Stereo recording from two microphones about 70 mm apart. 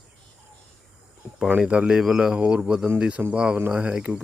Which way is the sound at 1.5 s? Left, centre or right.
Centre.